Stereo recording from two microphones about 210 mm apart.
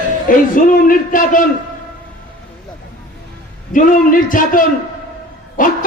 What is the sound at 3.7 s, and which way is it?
A man's voice, 40° left (ahead or behind).